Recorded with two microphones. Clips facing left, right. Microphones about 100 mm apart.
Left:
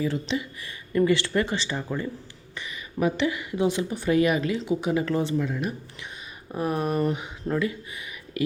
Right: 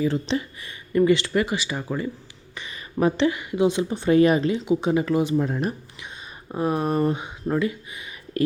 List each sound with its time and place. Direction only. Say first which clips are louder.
0.6 s speech: right 3 dB; 20° right (ahead or behind)
2.6 s speech: right 3 dB; 30° right (ahead or behind); by 5.3 s 15° right (ahead or behind)
5.4 s speech: right 3 dB; 40° right (ahead or behind)
6.5 s speech: right 3 dB; 25° right (ahead or behind)
8.4 s speech: right 5 dB; 40° right (ahead or behind)